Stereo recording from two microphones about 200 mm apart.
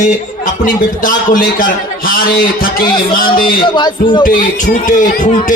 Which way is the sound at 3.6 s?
25° left (ahead or behind).